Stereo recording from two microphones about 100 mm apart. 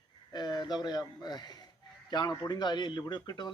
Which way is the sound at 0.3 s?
45° left (ahead or behind).